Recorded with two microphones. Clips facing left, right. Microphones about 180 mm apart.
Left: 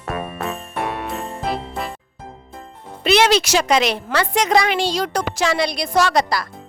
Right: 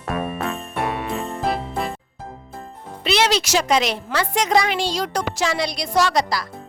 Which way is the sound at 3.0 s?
55° left (ahead or behind).